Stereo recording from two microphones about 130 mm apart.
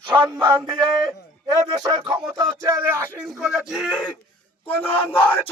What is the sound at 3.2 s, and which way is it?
Speech, centre (ahead or behind).